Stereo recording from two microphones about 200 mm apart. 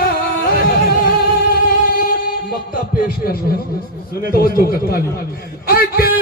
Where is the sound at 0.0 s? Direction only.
45° left (ahead or behind).